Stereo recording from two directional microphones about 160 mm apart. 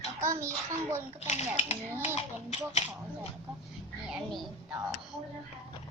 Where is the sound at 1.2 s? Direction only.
45° left (ahead or behind).